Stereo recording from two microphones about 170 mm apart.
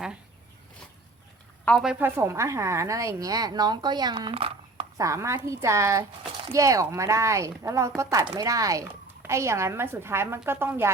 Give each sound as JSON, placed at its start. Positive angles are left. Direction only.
{"t": 1.6, "sound": "a woman's voice", "side_deg": 0}
{"t": 4.9, "sound": "speech", "side_deg": -20}